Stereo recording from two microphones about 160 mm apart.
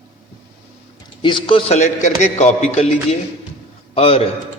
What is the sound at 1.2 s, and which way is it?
A man's voice, 30° left (ahead or behind).